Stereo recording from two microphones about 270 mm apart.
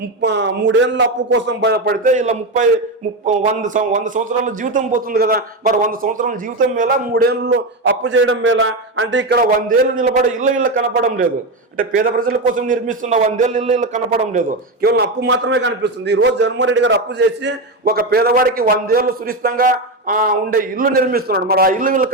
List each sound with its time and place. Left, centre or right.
0.2 s a man's voice: right